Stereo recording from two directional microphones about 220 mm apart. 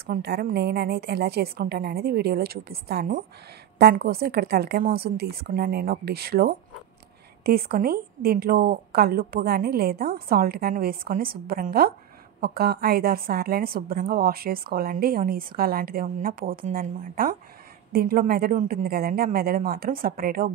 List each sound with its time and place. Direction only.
0.0 s a woman's voice: 45° right (ahead or behind)